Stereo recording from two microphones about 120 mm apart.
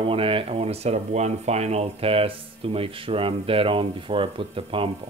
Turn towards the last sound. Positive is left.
turn(degrees=-50)  # may be behind; listen again after turning